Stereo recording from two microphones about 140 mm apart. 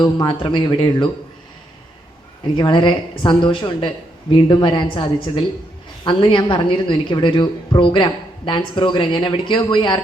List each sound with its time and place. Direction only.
0.0 s a woman's voice: 30° left (ahead or behind)
2.6 s a woman's voice: 35° left (ahead or behind)